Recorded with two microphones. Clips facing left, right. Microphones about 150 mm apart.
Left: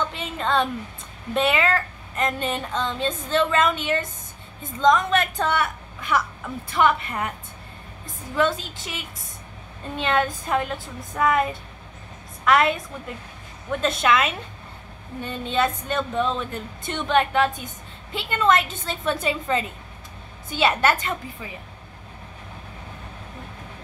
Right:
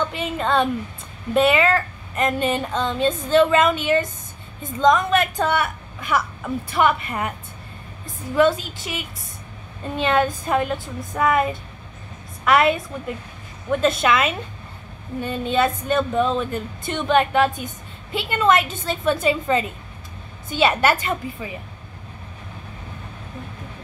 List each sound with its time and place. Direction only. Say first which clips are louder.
0.1 s a woman's voice: right 3 dB; 5° right (ahead or behind)
8.4 s a woman's voice: right 5 dB; 5° right (ahead or behind)